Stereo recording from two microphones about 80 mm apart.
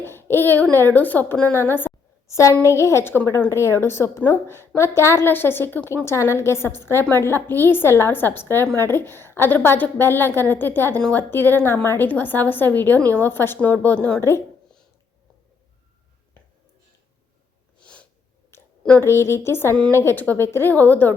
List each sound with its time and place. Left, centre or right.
0.0 s a sound: left
0.8 s a woman's voice: left
2.2 s a woman's voice: left
13.8 s speech: centre
14.2 s a woman's voice: left
17.8 s sneeze: centre
18.9 s a woman's voice: left